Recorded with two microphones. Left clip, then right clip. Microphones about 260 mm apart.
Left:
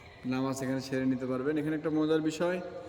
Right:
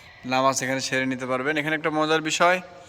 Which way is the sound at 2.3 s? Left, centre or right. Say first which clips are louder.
Right 11 dB; centre.